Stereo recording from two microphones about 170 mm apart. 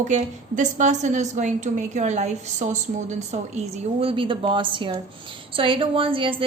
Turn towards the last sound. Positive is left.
turn(degrees=-30)  # may be behind; listen again after turning